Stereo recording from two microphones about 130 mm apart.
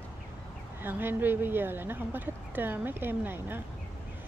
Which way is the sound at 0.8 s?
15° right (ahead or behind).